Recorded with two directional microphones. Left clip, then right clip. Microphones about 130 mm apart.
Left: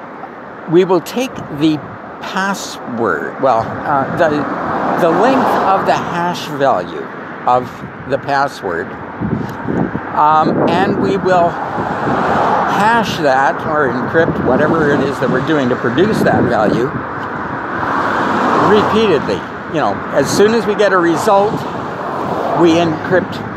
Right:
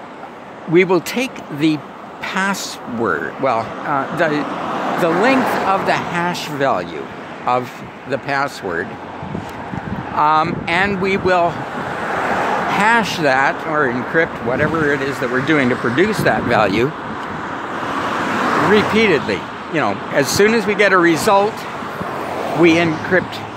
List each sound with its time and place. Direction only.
0.7 s speech: 40° right (ahead or behind)
4.4 s speech: 10° left (ahead or behind)
5.7 s speech: 35° right (ahead or behind)
10.1 s speech: 35° right (ahead or behind)
11.8 s vehicle: 5° left (ahead or behind)
12.6 s speech: 35° right (ahead or behind); by 16.9 s 50° right (ahead or behind)
17.8 s vehicle: centre (ahead or behind)
18.9 s speech: 40° right (ahead or behind)
22.0 s a sound: 15° left (ahead or behind)
22.6 s speech: 40° right (ahead or behind)